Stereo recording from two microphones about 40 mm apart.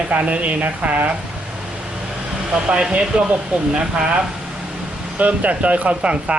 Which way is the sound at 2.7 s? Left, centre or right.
Right.